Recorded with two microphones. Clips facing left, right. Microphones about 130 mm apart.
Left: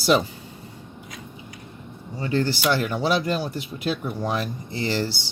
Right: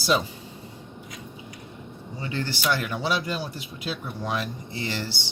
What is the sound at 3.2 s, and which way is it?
Speech, 55° left (ahead or behind).